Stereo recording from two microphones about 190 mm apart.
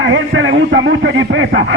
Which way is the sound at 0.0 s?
80° right.